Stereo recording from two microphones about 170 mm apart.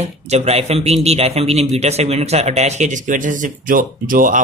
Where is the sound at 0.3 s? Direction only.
40° right (ahead or behind).